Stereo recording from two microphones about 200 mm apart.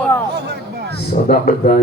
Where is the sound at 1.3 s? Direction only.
45° left (ahead or behind).